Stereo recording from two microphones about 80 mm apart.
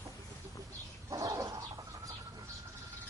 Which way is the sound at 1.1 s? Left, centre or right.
Right.